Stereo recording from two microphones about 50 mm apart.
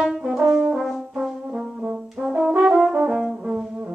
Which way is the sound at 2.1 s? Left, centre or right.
Centre.